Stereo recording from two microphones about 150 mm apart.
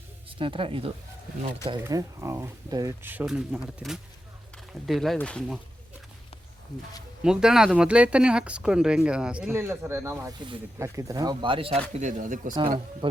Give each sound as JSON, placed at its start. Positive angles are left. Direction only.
{"t": 0.3, "sound": "speech", "side_deg": -35}
{"t": 1.8, "sound": "speech", "side_deg": -20}
{"t": 3.0, "sound": "speech", "side_deg": -10}
{"t": 7.2, "sound": "speech", "side_deg": -5}
{"t": 9.5, "sound": "speech", "side_deg": -15}